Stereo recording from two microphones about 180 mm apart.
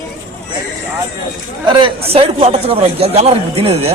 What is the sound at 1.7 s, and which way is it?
A man's voice, 25° right (ahead or behind).